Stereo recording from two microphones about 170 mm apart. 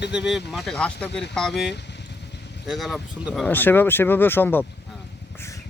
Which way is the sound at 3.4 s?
10° left (ahead or behind).